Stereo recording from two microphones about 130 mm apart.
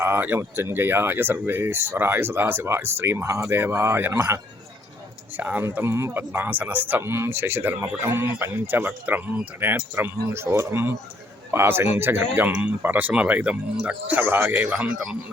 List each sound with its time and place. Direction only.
0.0 s a man's voice: 15° right (ahead or behind)